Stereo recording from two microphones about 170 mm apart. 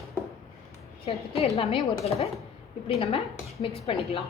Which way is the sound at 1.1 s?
35° left (ahead or behind).